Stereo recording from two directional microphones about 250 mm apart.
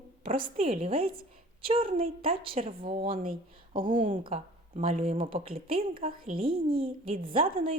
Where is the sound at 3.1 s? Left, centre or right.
Right.